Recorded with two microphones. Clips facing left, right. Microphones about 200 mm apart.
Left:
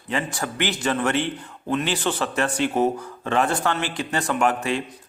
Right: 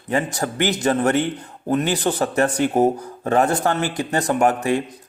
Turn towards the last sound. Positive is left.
turn(degrees=-40)  # may be behind; listen again after turning